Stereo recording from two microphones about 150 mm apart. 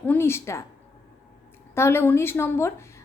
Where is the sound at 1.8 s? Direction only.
15° left (ahead or behind).